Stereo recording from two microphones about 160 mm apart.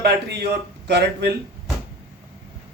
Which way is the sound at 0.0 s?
85° right.